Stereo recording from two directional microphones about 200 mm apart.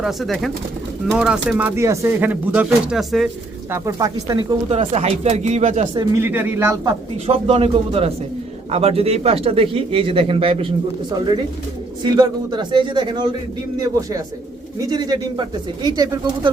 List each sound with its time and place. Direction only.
0.0 s speech: centre (ahead or behind)
3.7 s speech: 15° right (ahead or behind)
4.7 s speech: 30° right (ahead or behind)
5.9 s speech: 20° right (ahead or behind)
6.2 s speech: 10° right (ahead or behind)
7.3 s speech: 30° right (ahead or behind)
12.0 s speech: 20° right (ahead or behind)
14.8 s speech: 20° right (ahead or behind)